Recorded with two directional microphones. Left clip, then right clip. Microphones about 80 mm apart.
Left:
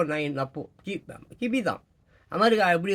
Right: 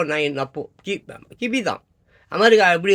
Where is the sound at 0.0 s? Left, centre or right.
Left.